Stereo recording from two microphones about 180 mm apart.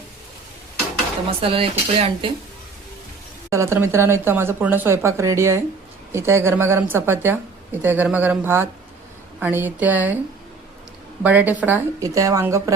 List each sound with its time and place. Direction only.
1.3 s speech: 30° right (ahead or behind)
3.5 s speech: 15° right (ahead or behind)
11.2 s speech: 10° right (ahead or behind)